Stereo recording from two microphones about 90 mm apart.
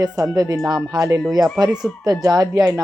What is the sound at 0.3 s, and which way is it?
Speech, 40° right (ahead or behind).